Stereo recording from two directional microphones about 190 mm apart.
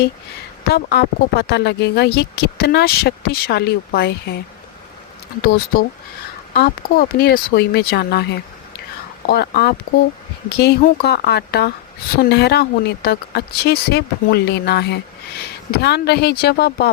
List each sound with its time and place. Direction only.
0.7 s speech: 60° left (ahead or behind)
5.4 s speech: 55° left (ahead or behind)